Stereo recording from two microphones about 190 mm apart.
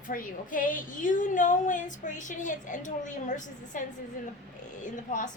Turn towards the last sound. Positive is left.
turn(degrees=40)  # may be behind; listen again after turning